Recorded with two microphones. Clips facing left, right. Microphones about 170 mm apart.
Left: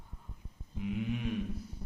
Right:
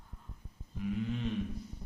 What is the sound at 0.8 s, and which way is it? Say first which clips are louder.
Speech: even; 15° left (ahead or behind).